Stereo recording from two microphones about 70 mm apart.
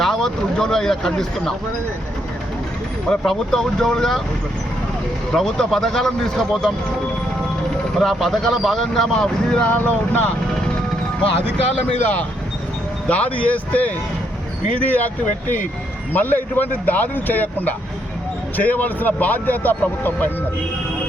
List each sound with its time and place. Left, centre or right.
0.0 s speech: centre
3.1 s speech: centre
5.3 s speech: centre
7.9 s speech: centre
9.6 s speech: left
13.1 s speech: left